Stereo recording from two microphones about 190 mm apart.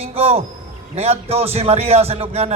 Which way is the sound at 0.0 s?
30° right (ahead or behind).